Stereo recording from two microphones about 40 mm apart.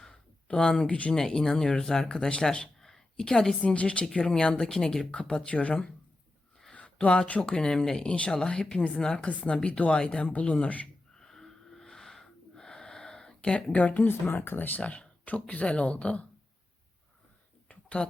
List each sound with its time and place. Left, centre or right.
0.4 s speech: left
1.1 s a woman's voice: centre
3.6 s speech: left; by 5.0 s centre
5.1 s speech: left
6.7 s a sound: left
7.3 s speech: left
11.1 s wheeze: centre
13.7 s speech: left
14.1 s speech: left
14.8 s speech: left
17.7 s a sound: left